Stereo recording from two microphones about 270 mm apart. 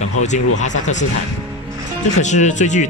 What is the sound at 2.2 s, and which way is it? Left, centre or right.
Speech, left.